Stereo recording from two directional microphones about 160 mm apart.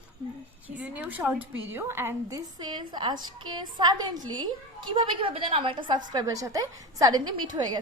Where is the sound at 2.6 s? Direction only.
25° right (ahead or behind).